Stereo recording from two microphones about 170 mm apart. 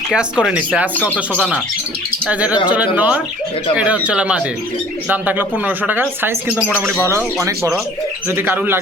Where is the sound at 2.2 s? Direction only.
5° right (ahead or behind).